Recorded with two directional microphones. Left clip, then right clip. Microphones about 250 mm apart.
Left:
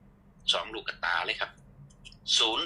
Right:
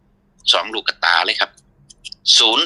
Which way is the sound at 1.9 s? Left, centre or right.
Right.